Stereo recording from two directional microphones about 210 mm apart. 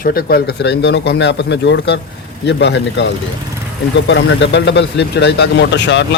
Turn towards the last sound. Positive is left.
turn(degrees=60)  # may be behind; listen again after turning